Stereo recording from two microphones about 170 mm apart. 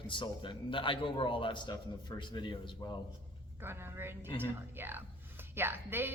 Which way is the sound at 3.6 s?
15° right (ahead or behind).